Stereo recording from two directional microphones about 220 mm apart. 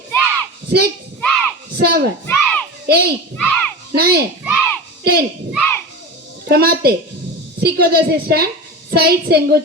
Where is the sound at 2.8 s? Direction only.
45° right (ahead or behind).